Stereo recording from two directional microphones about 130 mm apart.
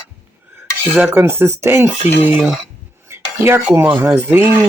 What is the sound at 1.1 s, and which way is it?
Speech, 20° right (ahead or behind).